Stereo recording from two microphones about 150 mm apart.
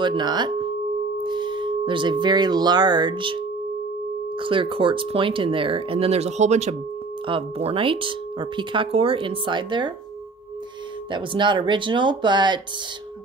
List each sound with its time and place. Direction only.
0.0 s speech: 30° right (ahead or behind)
11.1 s speech: 30° right (ahead or behind)